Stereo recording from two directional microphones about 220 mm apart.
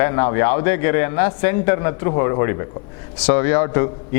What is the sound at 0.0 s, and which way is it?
A man's voice, 15° left (ahead or behind).